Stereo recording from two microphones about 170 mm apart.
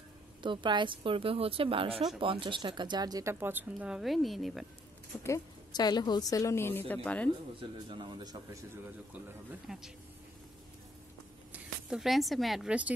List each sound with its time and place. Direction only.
0.4 s a woman's voice: 30° right (ahead or behind); by 4.6 s centre (ahead or behind)
5.2 s a woman's voice: 20° left (ahead or behind)
7.9 s a man's voice: 25° right (ahead or behind)
9.1 s speech: 5° right (ahead or behind)
11.5 s speech: 5° right (ahead or behind)